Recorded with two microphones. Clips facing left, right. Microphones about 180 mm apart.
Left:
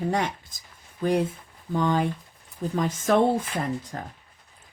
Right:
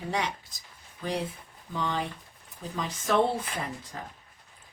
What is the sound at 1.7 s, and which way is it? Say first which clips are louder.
Speech: left 8 dB; 50° left (ahead or behind).